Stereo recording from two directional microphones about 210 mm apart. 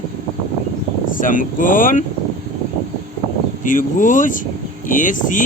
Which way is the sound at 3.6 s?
40° left (ahead or behind).